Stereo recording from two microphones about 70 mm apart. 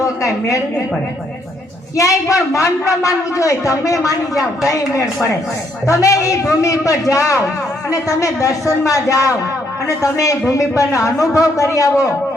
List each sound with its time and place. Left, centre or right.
0.0 s a woman's voice: left
2.0 s a woman's voice: left